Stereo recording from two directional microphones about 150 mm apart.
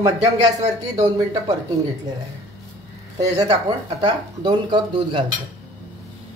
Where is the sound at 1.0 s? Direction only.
20° right (ahead or behind).